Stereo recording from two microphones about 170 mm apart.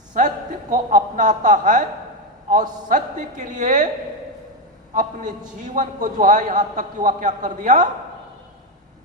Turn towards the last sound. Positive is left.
turn(degrees=-45)  # may be behind; listen again after turning